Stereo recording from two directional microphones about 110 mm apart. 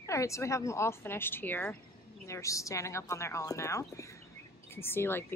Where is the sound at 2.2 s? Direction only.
30° left (ahead or behind).